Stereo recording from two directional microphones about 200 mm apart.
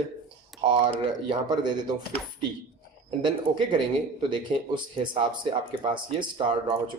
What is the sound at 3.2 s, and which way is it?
Speech, 25° right (ahead or behind).